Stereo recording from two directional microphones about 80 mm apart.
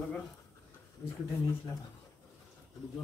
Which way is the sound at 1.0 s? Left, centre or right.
Left.